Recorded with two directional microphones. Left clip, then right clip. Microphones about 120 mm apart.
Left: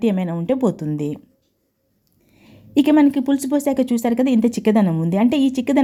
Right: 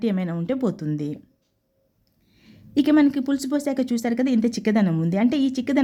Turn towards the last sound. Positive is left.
turn(degrees=20)  # may be behind; listen again after turning